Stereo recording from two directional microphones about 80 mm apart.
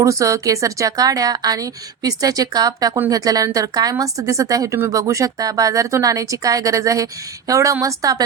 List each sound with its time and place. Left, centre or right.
0.0 s speech: right